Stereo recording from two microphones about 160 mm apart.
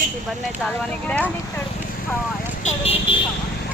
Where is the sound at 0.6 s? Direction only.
10° left (ahead or behind).